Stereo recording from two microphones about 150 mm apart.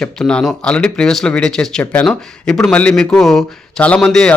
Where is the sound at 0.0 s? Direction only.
5° left (ahead or behind).